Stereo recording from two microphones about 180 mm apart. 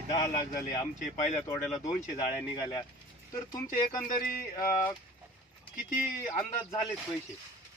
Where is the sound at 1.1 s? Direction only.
40° left (ahead or behind).